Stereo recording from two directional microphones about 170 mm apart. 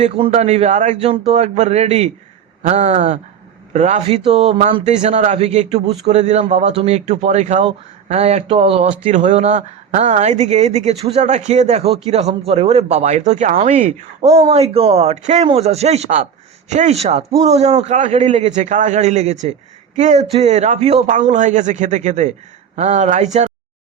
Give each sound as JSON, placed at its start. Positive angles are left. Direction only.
{"t": 0.0, "sound": "a man's voice", "side_deg": -40}